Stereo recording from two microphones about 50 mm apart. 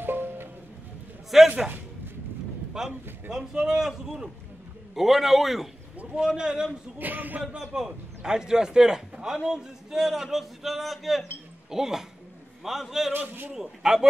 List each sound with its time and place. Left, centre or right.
0.0 s music: right
1.3 s a man's voice: centre
2.7 s a man's voice: centre
6.1 s a man's voice: centre
7.0 s speech: right
7.5 s a man's voice: centre
13.1 s speech: right
13.6 s a man's voice: centre